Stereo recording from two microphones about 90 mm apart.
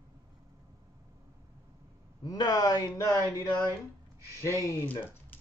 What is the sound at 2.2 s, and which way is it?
Speech, 45° left (ahead or behind).